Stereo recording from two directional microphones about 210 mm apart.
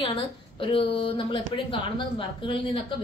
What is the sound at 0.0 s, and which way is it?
A woman's voice, 25° left (ahead or behind).